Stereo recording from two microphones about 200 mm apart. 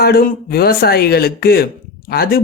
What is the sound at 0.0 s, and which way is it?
Speech, 50° left (ahead or behind).